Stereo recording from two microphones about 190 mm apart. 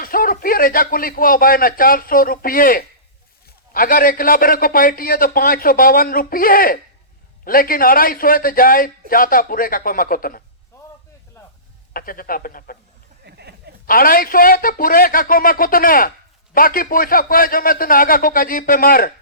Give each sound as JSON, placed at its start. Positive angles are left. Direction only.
{"t": 0.0, "sound": "a man's voice", "side_deg": 50}
{"t": 11.9, "sound": "a man's voice", "side_deg": 50}
{"t": 13.2, "sound": "a sound", "side_deg": -60}
{"t": 13.8, "sound": "a man's voice", "side_deg": 50}